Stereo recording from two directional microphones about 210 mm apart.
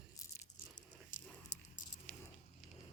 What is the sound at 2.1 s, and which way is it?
Squish, 5° left (ahead or behind).